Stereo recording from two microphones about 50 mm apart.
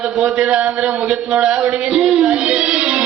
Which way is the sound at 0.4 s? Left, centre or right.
Right.